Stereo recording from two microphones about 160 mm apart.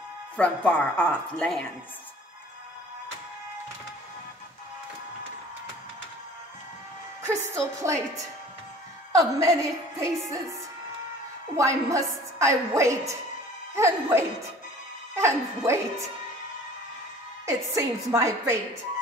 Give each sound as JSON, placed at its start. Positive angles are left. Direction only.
{"t": 0.4, "sound": "a woman's voice", "side_deg": 10}
{"t": 7.2, "sound": "a woman's voice", "side_deg": -20}
{"t": 9.1, "sound": "a woman's voice", "side_deg": -20}
{"t": 11.5, "sound": "a woman's voice", "side_deg": -20}
{"t": 17.5, "sound": "a woman's voice", "side_deg": -20}